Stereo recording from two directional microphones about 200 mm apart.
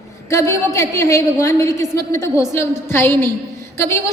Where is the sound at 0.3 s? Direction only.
15° left (ahead or behind).